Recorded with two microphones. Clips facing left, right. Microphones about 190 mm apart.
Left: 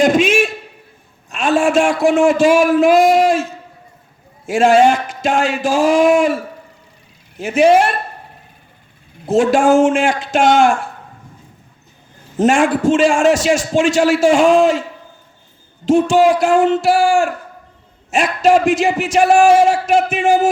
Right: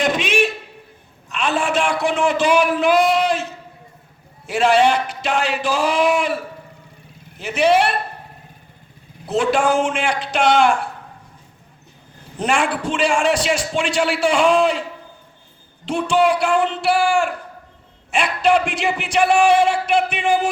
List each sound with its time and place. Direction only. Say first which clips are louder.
0.0 s a sound: left 6 dB; 45° left (ahead or behind)
1.3 s a man's voice: left 6 dB; 45° left (ahead or behind)
9.2 s a man's voice: left 5 dB; 45° left (ahead or behind)
12.4 s a man's voice: left 7 dB; 45° left (ahead or behind)
15.9 s a man's voice: left 6 dB; 45° left (ahead or behind)